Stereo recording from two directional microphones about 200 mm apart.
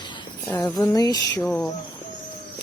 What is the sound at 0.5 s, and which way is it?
Speech, 20° left (ahead or behind).